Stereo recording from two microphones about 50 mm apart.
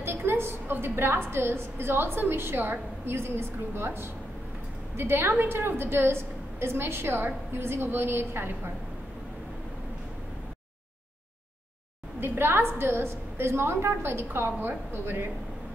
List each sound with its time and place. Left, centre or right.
0.0 s a woman's voice: right
12.2 s a woman's voice: right